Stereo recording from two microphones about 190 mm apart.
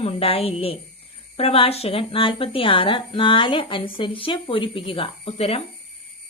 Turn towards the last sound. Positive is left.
turn(degrees=30)  # may be behind; listen again after turning